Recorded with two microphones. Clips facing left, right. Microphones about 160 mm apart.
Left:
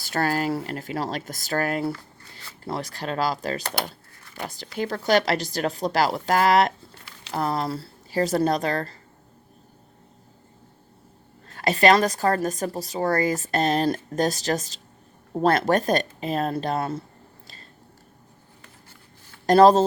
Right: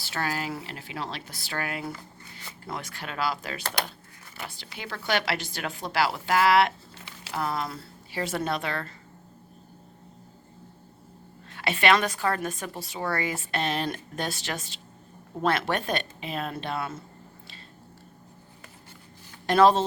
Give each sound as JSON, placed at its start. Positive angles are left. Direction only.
{"t": 0.0, "sound": "a woman's voice", "side_deg": 45}
{"t": 11.4, "sound": "a woman's voice", "side_deg": 40}
{"t": 19.5, "sound": "a woman's voice", "side_deg": 40}